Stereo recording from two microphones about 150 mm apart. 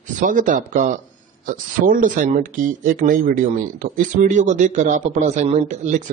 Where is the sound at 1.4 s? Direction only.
70° right (ahead or behind).